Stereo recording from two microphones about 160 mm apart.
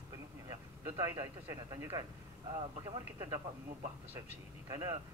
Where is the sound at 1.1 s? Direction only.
20° right (ahead or behind).